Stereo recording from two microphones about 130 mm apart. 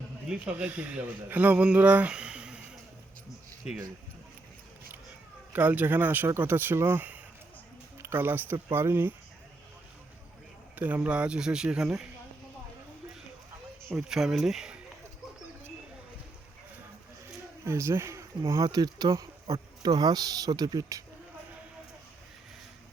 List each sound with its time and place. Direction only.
0.3 s speech: 10° right (ahead or behind)
5.5 s speech: 10° right (ahead or behind)
10.8 s speech: 15° right (ahead or behind)
13.9 s speech: 5° right (ahead or behind)
17.7 s speech: 20° right (ahead or behind)